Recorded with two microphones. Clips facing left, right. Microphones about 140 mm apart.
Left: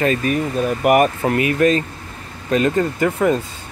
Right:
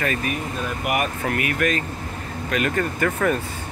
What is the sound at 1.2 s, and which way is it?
Speech, 25° left (ahead or behind).